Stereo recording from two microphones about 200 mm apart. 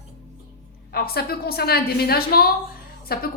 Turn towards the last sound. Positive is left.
turn(degrees=50)  # may be behind; listen again after turning